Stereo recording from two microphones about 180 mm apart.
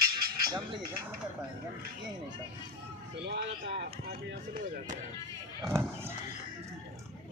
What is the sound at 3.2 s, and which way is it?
Speech, 70° right (ahead or behind).